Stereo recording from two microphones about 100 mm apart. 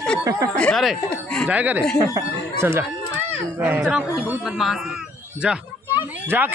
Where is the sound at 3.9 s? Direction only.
10° right (ahead or behind).